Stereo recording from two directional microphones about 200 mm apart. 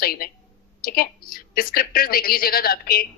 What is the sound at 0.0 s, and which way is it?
A woman's voice, 50° left (ahead or behind).